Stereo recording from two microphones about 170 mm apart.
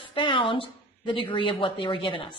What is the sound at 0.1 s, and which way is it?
A woman's voice, 30° left (ahead or behind).